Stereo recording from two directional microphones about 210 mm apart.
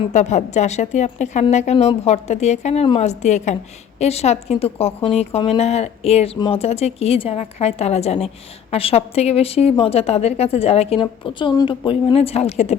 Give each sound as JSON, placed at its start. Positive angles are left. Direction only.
{"t": 0.1, "sound": "a woman's voice", "side_deg": 35}